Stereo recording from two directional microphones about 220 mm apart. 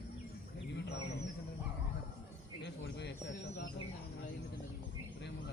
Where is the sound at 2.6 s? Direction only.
50° left (ahead or behind).